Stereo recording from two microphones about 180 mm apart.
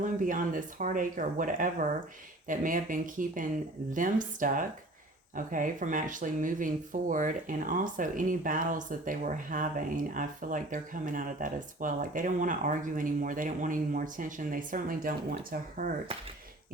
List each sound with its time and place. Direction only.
0.0 s speech: 45° right (ahead or behind)